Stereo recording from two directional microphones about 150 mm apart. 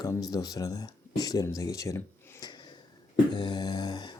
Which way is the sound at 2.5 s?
30° left (ahead or behind).